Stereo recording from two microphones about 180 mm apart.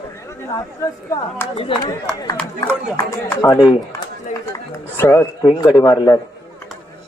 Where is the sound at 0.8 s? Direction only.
20° left (ahead or behind).